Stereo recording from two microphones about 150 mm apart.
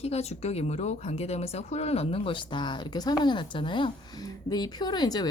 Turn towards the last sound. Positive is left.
turn(degrees=30)  # may be behind; listen again after turning